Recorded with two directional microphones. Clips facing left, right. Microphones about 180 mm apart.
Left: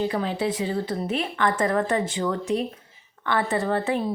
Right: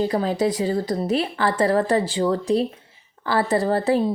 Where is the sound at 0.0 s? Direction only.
40° right (ahead or behind).